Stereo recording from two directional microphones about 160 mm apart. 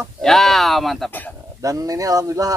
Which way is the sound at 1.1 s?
10° left (ahead or behind).